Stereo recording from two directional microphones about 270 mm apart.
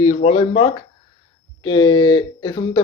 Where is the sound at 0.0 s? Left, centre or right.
Left.